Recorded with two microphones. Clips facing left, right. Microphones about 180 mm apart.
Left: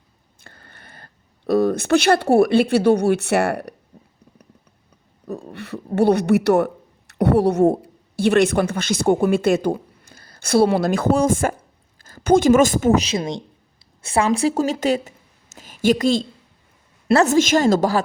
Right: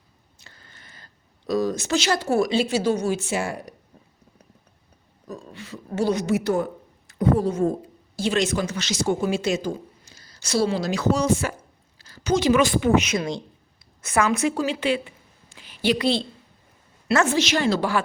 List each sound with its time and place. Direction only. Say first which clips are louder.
0.3 s speech: left 5 dB; 55° left (ahead or behind)
5.2 s a woman's voice: left 6 dB; 60° left (ahead or behind); by 13.1 s 40° left (ahead or behind)
13.1 s a woman's voice: left 2 dB; 20° left (ahead or behind)
14.5 s a woman's voice: left 4 dB; 45° left (ahead or behind)